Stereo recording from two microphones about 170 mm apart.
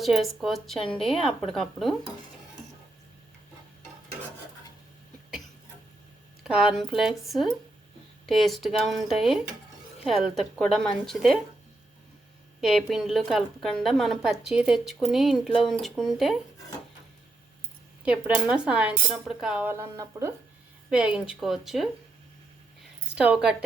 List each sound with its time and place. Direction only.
0.0 s a woman's voice: centre (ahead or behind)
6.4 s a woman's voice: 5° right (ahead or behind)
12.5 s a woman's voice: centre (ahead or behind)
18.0 s speech: 10° right (ahead or behind)
20.9 s a woman's voice: 5° right (ahead or behind)
23.1 s speech: 5° right (ahead or behind)